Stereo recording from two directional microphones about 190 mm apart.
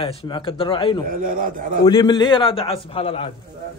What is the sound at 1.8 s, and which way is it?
A man's voice, 25° left (ahead or behind).